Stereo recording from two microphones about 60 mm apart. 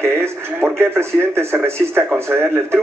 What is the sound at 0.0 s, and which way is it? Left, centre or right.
Speech, right.